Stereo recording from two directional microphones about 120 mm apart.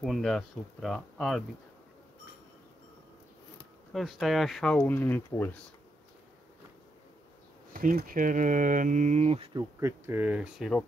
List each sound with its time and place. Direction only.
0.0 s speech: centre (ahead or behind)
3.9 s speech: centre (ahead or behind)
4.7 s speech: 15° left (ahead or behind)
8.3 s mantra: 90° right; by 9.5 s 60° right (ahead or behind)
9.6 s speech: 25° right (ahead or behind)
10.6 s speech: 5° left (ahead or behind)